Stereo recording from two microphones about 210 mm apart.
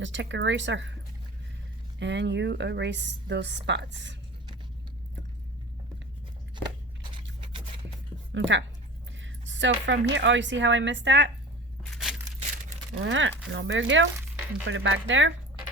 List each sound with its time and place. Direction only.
0.0 s a woman's voice: 60° right (ahead or behind)
2.0 s a woman's voice: 60° right (ahead or behind)
7.1 s a sound: 25° right (ahead or behind)
8.3 s a woman's voice: 60° right (ahead or behind)
11.9 s a sound: centre (ahead or behind)
13.0 s a woman's voice: 65° right (ahead or behind)